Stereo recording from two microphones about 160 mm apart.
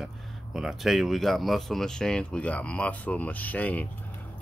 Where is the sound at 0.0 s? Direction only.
Centre (ahead or behind).